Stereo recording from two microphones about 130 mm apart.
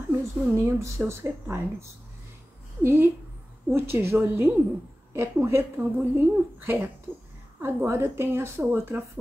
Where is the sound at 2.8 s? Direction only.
15° right (ahead or behind).